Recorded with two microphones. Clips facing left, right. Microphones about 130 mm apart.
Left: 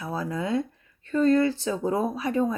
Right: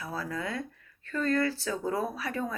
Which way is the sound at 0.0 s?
20° left (ahead or behind).